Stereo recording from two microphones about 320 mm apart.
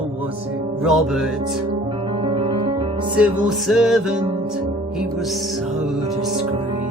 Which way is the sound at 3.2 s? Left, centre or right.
Centre.